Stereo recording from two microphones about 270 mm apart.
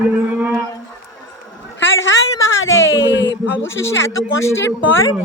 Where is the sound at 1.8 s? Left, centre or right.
Left.